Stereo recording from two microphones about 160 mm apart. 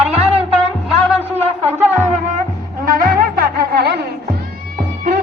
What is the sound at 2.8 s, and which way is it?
Music, 65° right (ahead or behind).